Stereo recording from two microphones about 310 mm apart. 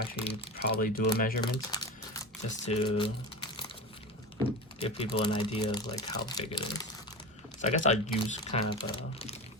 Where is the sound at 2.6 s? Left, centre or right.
Centre.